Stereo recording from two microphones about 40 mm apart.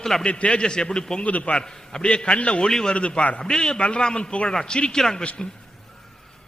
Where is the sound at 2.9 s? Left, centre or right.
Left.